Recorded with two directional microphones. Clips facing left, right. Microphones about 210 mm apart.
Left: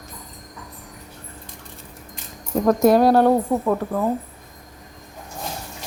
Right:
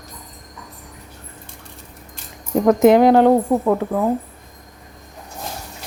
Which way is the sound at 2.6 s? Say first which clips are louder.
Right 3 dB; 20° right (ahead or behind).